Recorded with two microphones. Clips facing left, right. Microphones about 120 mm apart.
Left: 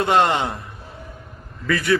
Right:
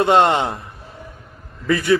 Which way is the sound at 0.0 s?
25° right (ahead or behind).